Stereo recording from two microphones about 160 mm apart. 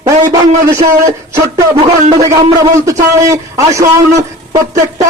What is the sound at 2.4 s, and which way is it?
Speech, 20° right (ahead or behind).